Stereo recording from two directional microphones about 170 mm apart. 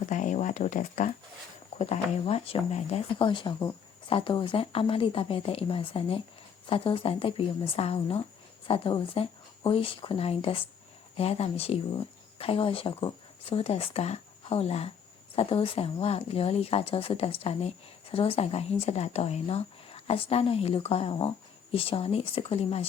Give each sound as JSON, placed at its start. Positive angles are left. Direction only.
{"t": 0.0, "sound": "speech", "side_deg": 50}
{"t": 1.8, "sound": "speech", "side_deg": 40}